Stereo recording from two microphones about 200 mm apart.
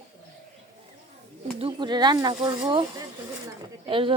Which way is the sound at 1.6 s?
25° right (ahead or behind).